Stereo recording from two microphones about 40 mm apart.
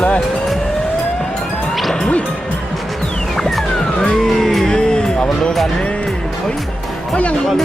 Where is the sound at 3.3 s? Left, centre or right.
Centre.